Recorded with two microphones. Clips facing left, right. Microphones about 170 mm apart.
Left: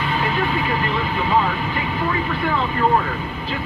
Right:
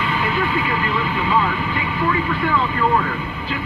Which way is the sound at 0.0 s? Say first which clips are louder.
Even; 35° left (ahead or behind).